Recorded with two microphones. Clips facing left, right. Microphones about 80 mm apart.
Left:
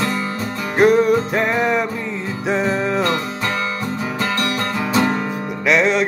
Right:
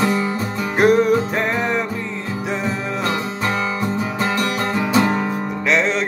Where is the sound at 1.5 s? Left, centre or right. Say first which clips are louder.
Left 3 dB; centre.